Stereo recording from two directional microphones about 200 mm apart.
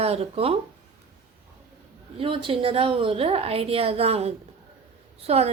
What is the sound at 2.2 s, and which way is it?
A woman's voice, 25° right (ahead or behind).